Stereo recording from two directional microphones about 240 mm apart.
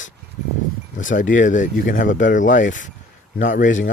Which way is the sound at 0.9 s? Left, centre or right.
Left.